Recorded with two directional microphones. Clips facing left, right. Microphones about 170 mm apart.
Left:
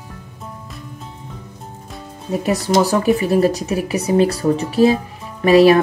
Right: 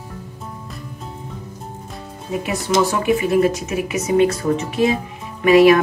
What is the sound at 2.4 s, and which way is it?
Speech, 35° left (ahead or behind).